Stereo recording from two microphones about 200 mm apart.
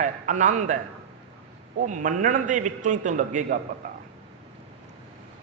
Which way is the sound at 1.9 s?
40° right (ahead or behind).